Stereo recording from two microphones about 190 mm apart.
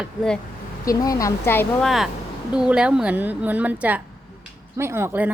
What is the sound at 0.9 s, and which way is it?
Speech, 20° left (ahead or behind).